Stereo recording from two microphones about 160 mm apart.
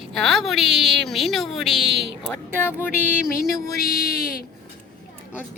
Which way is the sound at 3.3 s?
70° left (ahead or behind).